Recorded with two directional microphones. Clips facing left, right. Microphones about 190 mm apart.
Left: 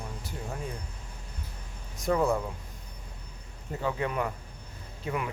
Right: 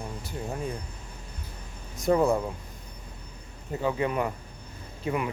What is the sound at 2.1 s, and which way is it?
Speech, 25° right (ahead or behind).